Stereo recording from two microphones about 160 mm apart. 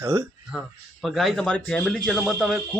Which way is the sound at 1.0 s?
Centre (ahead or behind).